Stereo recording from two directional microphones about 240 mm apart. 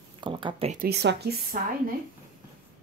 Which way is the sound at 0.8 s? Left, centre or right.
Right.